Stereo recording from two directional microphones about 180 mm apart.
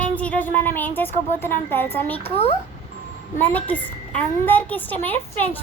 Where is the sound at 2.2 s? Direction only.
35° left (ahead or behind).